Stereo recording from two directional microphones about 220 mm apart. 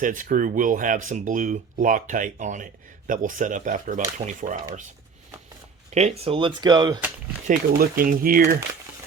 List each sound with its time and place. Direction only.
0.0 s speech: 35° right (ahead or behind)
5.9 s speech: 30° right (ahead or behind)
7.4 s speech: 40° right (ahead or behind)